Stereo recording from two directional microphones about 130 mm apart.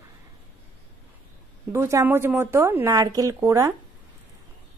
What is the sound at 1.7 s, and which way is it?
Speech, 25° right (ahead or behind).